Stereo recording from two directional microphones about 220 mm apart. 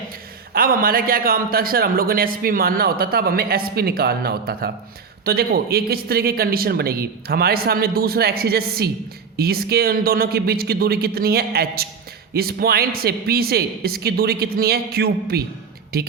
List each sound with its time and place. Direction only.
0.5 s a man's voice: 40° right (ahead or behind)